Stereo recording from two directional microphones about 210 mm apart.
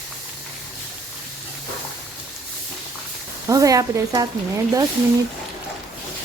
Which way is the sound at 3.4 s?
15° right (ahead or behind).